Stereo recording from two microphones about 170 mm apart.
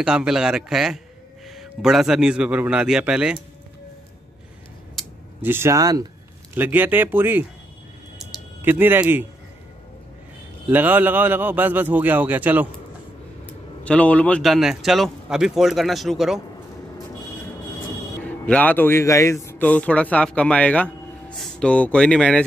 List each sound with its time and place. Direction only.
0.0 s a man's voice: 5° right (ahead or behind)
5.4 s a man's voice: 15° right (ahead or behind)
8.2 s a sound: 10° right (ahead or behind)
10.7 s a man's voice: 10° right (ahead or behind)
13.5 s a man's voice: 5° left (ahead or behind)
18.2 s a man's voice: 10° left (ahead or behind)